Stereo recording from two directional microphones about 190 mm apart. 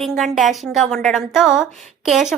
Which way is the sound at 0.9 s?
Centre (ahead or behind).